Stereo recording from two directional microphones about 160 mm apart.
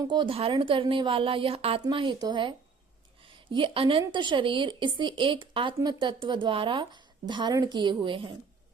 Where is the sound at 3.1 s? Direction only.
35° right (ahead or behind).